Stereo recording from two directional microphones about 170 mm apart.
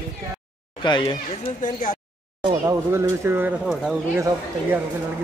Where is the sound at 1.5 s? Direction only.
45° left (ahead or behind).